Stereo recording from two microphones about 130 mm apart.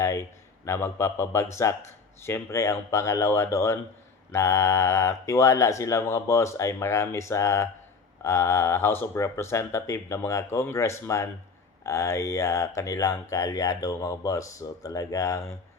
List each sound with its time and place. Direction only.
0.0 s speech: 20° left (ahead or behind)